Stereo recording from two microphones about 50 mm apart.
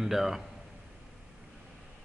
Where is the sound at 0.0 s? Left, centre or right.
Centre.